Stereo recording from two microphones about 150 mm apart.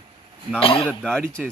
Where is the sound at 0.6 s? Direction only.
35° left (ahead or behind).